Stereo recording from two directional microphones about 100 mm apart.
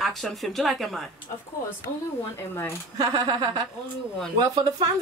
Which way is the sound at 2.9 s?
40° right (ahead or behind).